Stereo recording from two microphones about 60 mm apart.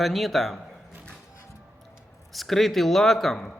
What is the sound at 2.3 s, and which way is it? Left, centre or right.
A man's voice, centre.